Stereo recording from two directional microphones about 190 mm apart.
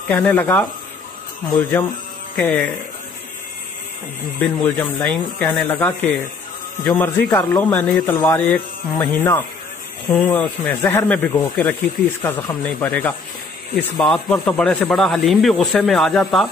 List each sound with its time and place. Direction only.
0.3 s speech: 10° left (ahead or behind)
4.4 s a man's voice: 10° left (ahead or behind)